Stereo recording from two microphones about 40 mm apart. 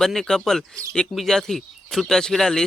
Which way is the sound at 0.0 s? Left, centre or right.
Centre.